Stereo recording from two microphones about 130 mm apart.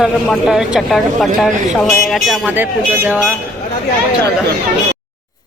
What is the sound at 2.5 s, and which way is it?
Speech, 15° right (ahead or behind).